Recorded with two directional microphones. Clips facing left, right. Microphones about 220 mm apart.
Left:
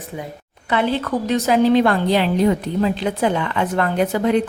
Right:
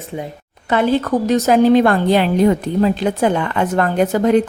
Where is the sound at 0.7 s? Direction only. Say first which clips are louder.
Right 4 dB; 45° right (ahead or behind).